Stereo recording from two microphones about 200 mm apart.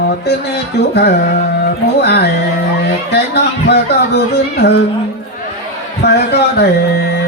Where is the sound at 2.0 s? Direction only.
55° left (ahead or behind).